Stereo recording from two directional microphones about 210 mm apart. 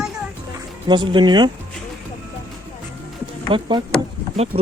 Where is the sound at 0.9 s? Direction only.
20° right (ahead or behind).